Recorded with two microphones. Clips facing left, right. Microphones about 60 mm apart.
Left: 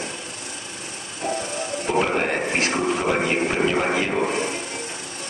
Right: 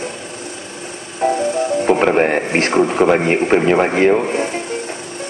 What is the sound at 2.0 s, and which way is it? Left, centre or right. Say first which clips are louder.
A man's voice: right 7 dB; right.